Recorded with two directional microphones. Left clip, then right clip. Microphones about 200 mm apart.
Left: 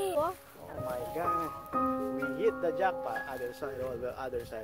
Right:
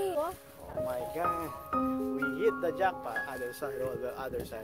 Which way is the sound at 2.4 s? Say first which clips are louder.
Even; 45° right (ahead or behind).